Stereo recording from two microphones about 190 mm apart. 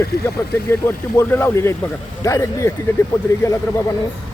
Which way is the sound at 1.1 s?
15° left (ahead or behind).